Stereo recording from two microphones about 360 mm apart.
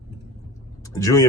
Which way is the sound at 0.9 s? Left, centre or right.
Centre.